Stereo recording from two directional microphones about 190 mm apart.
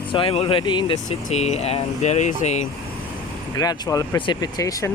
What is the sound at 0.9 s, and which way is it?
Speech, 35° left (ahead or behind).